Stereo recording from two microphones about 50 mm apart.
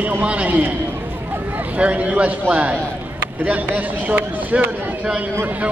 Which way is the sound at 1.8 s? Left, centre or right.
Right.